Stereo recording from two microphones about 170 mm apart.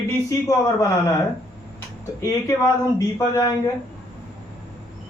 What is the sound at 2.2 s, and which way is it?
A man's voice, 15° left (ahead or behind).